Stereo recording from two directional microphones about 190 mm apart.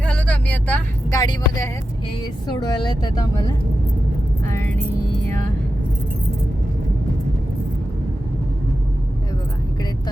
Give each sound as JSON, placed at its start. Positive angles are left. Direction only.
{"t": 0.0, "sound": "vehicle", "side_deg": 5}
{"t": 1.2, "sound": "speech", "side_deg": 20}